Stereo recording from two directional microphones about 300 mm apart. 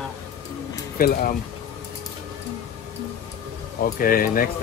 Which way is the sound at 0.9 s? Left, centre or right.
Left.